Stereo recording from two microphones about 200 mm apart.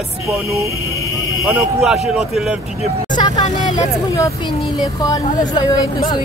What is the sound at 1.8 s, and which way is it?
Speech, centre (ahead or behind).